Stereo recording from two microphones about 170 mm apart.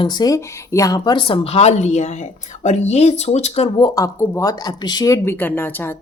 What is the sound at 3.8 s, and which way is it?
Speech, 20° left (ahead or behind).